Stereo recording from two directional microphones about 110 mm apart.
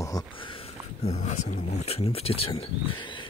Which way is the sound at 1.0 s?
90° left.